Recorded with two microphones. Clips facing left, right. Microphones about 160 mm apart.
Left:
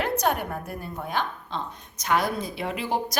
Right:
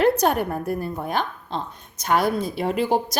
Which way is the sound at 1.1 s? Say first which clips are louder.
Even; 35° right (ahead or behind).